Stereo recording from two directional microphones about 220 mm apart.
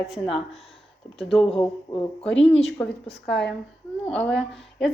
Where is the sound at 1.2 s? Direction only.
Centre (ahead or behind).